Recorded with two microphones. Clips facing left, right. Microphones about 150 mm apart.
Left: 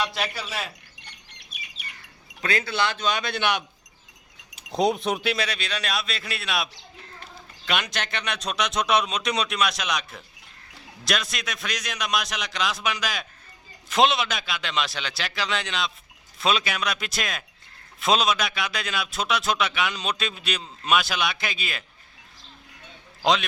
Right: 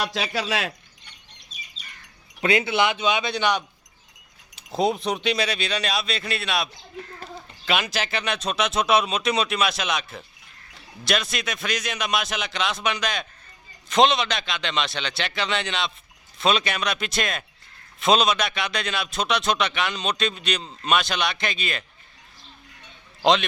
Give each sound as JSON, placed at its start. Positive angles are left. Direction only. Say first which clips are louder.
{"t": 0.1, "sound": "speech", "louder": "right 5 dB", "side_deg": -90}
{"t": 1.3, "sound": "bird", "louder": "left 1 dB", "side_deg": 65}
{"t": 2.4, "sound": "speech", "louder": "right 5 dB", "side_deg": -20}
{"t": 2.9, "sound": "a man's voice", "louder": "right 3 dB", "side_deg": -5}
{"t": 4.7, "sound": "a man's voice", "louder": "even", "side_deg": 0}
{"t": 23.2, "sound": "a man's voice", "louder": "right 3 dB", "side_deg": 0}